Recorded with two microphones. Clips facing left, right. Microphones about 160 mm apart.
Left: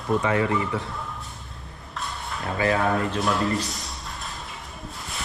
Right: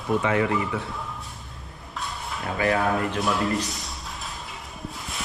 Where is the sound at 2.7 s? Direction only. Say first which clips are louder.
Left 1 dB; centre (ahead or behind).